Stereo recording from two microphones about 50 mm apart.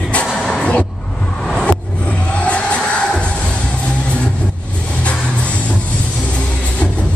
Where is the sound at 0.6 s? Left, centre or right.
Left.